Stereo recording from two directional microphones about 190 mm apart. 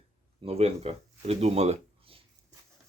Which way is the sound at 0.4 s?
35° right (ahead or behind).